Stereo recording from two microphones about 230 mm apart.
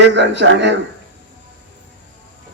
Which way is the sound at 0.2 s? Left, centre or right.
Right.